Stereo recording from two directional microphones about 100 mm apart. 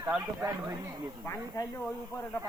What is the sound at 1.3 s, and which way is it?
Speech, 30° left (ahead or behind).